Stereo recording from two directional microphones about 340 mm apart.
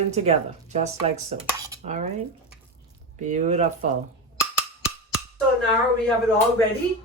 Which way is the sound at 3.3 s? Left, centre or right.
Right.